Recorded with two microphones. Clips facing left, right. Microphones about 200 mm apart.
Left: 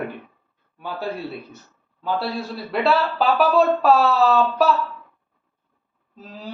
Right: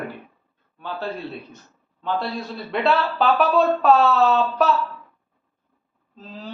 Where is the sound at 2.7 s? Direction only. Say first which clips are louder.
Left 1 dB; centre (ahead or behind).